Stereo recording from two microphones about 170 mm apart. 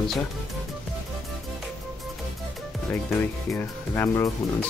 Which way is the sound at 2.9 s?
15° left (ahead or behind).